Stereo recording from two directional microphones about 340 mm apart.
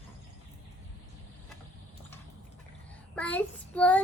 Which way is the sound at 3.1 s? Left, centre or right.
Centre.